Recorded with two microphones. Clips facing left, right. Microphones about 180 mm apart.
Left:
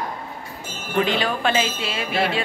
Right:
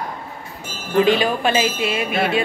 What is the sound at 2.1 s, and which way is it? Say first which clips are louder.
Music: even; 30° left (ahead or behind).